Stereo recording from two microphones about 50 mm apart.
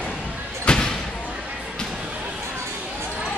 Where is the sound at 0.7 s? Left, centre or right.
Centre.